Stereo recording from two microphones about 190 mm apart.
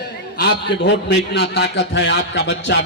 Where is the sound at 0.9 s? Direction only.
65° left (ahead or behind).